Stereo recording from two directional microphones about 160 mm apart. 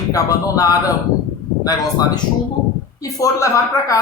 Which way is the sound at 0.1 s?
20° left (ahead or behind).